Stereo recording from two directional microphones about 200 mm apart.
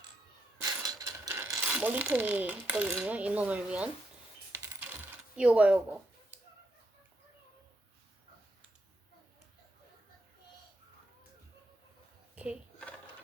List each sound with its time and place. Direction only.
0.6 s mechanisms: 20° right (ahead or behind)
1.7 s coin: 10° right (ahead or behind)